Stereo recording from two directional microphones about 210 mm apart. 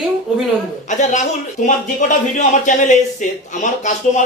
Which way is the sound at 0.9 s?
35° left (ahead or behind).